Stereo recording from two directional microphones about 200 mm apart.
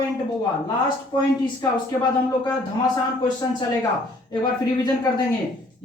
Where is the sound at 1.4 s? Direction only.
20° left (ahead or behind).